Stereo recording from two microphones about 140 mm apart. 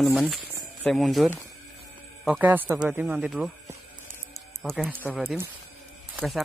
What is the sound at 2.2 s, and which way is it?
Speech, 10° right (ahead or behind).